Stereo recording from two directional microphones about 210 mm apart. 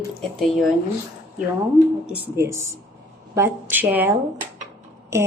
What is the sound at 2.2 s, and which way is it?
Speech, 10° right (ahead or behind).